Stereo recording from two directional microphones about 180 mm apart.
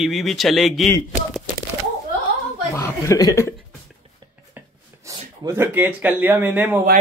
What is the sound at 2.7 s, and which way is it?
Speech, 15° left (ahead or behind).